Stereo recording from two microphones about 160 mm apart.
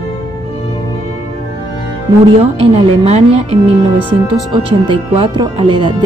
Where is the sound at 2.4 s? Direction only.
40° right (ahead or behind).